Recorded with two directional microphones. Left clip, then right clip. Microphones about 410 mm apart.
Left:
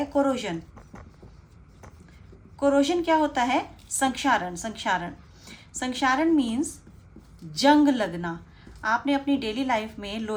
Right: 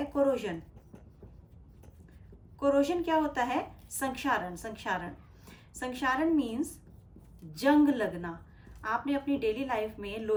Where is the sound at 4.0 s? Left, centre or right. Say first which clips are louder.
Left 7 dB; centre.